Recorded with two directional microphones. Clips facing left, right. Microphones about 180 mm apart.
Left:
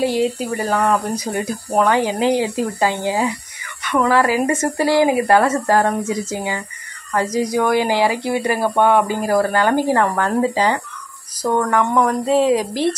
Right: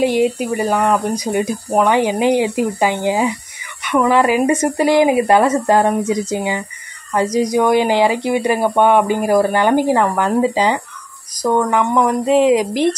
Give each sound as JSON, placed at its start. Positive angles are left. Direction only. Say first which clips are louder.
{"t": 0.0, "sound": "speech", "louder": "right 3 dB", "side_deg": -20}